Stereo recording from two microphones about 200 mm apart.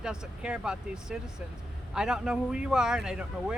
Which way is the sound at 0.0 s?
5° right (ahead or behind).